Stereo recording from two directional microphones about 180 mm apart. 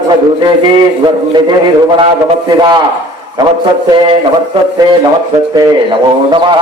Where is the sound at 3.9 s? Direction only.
25° right (ahead or behind).